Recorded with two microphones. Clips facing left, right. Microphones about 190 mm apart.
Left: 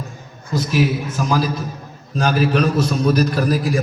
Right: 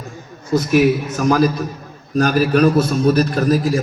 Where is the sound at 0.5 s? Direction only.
55° right (ahead or behind).